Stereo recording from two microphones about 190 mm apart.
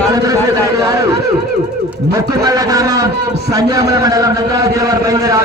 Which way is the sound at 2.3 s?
20° right (ahead or behind).